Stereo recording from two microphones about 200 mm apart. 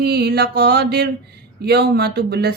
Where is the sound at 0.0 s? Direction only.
55° right (ahead or behind).